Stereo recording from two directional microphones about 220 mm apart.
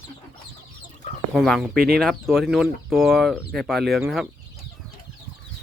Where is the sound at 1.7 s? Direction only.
45° right (ahead or behind).